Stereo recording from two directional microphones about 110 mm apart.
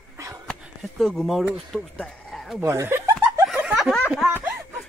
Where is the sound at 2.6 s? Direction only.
25° right (ahead or behind).